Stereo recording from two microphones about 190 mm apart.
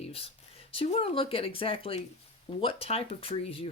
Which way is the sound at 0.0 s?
30° left (ahead or behind).